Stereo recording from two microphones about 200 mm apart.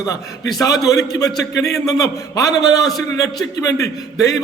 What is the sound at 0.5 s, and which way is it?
A man's voice, 15° left (ahead or behind).